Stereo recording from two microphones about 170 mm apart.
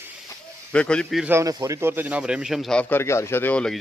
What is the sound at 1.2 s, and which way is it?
A man's voice, 15° right (ahead or behind).